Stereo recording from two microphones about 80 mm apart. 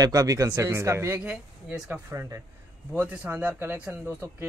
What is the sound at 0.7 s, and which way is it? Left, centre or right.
Speech, right.